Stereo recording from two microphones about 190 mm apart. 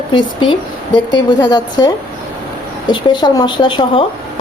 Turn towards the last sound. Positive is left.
turn(degrees=25)  # may be behind; listen again after turning